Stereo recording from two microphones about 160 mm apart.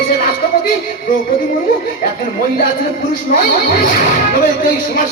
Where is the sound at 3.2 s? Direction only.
55° left (ahead or behind).